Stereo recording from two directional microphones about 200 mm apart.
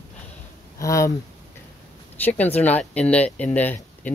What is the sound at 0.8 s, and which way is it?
Speech, 15° left (ahead or behind).